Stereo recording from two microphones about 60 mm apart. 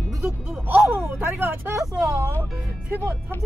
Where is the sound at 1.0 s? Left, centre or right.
Right.